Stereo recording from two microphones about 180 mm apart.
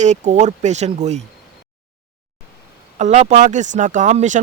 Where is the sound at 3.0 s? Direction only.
40° right (ahead or behind).